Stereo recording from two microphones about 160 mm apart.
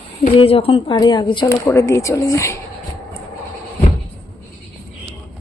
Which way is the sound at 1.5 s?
15° left (ahead or behind).